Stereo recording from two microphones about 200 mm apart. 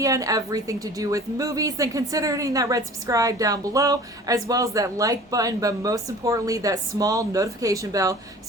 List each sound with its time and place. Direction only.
0.0 s a woman's voice: 15° right (ahead or behind)